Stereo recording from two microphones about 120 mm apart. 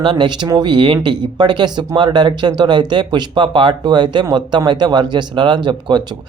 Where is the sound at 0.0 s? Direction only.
40° right (ahead or behind).